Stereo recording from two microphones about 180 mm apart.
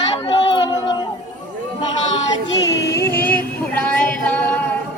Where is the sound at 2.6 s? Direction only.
20° left (ahead or behind).